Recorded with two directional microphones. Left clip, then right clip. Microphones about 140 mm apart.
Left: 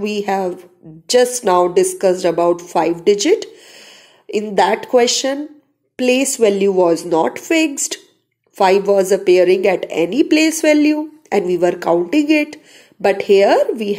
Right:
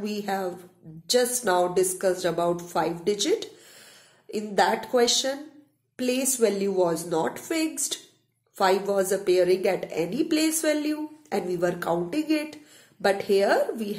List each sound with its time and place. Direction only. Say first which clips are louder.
0.0 s a woman's voice: left 11 dB; 40° left (ahead or behind)